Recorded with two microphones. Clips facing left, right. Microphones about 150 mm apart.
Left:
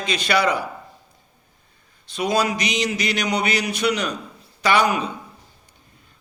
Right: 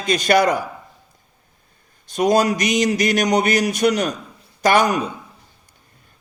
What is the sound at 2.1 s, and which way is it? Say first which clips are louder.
A man's voice: right 5 dB; 45° right (ahead or behind).